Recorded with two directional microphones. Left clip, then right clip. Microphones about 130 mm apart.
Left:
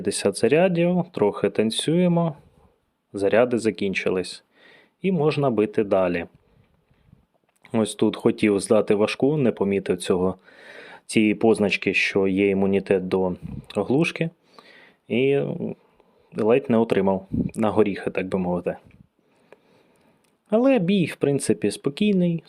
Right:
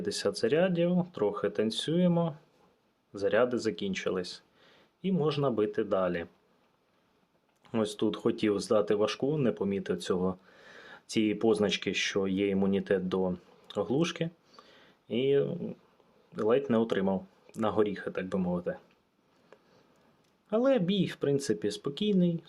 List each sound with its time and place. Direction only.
0.0 s speech: 60° left (ahead or behind)
7.6 s speech: 55° left (ahead or behind)
19.5 s a sound: 45° left (ahead or behind)
20.5 s speech: 60° left (ahead or behind)